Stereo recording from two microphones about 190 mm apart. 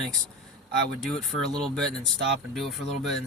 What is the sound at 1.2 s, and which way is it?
Speech, centre (ahead or behind).